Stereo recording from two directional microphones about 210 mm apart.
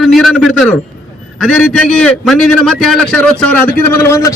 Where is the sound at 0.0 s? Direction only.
Centre (ahead or behind).